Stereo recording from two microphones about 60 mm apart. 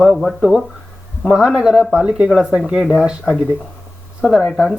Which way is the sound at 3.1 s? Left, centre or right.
Centre.